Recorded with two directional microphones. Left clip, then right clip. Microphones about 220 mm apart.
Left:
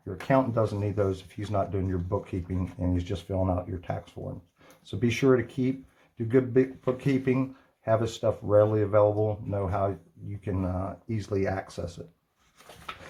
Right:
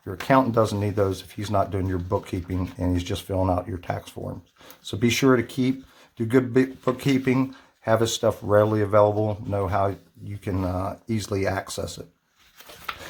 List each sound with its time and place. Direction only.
0.3 s speech: 30° right (ahead or behind)